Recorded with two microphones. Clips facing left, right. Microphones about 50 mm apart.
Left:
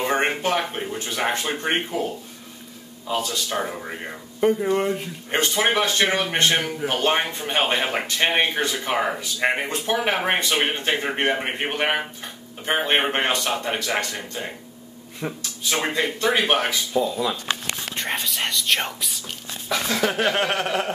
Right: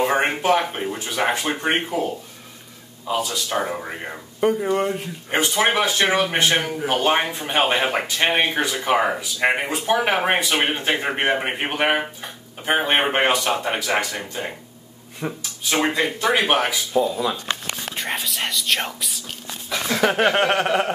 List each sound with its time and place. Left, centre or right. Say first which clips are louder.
0.0 s speech: right 2 dB; centre
3.1 s speech: right 2 dB; centre
15.2 s speech: right 1 dB; centre
20.0 s speech: right 5 dB; right